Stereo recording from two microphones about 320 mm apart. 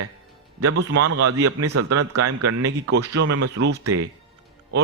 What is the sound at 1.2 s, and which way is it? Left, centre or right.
A man's voice, right.